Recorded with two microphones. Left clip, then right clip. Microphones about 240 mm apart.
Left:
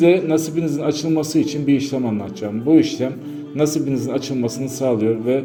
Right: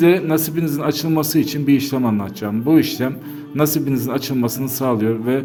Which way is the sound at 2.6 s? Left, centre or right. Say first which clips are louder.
Left 1 dB; right.